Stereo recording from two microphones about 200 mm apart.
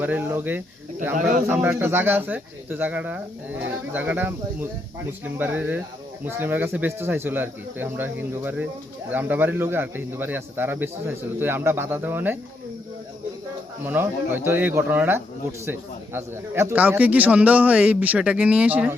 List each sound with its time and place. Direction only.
0.0 s a man's voice: 10° right (ahead or behind)
13.8 s a man's voice: 10° right (ahead or behind)